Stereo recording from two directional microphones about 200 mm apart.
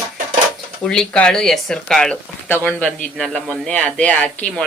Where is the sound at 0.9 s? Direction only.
5° left (ahead or behind).